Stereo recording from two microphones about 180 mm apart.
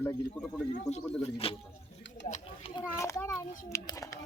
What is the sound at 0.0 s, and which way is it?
Speech, 10° left (ahead or behind).